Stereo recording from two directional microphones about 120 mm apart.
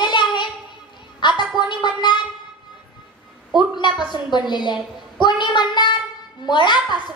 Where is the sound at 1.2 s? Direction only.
40° left (ahead or behind).